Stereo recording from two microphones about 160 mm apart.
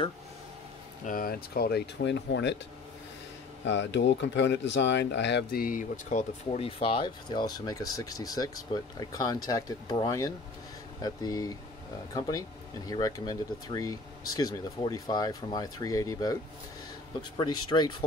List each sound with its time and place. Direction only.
1.0 s speech: 65° left (ahead or behind); by 2.6 s 90° left
3.7 s speech: 90° left; by 6.6 s 50° left (ahead or behind)
6.6 s speech: 35° left (ahead or behind)
17.4 s speech: 30° left (ahead or behind)